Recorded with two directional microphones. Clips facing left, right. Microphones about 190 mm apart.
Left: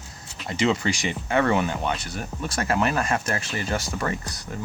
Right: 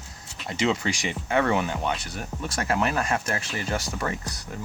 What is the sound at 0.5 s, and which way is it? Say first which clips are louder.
Speech: left 2 dB; 5° right (ahead or behind).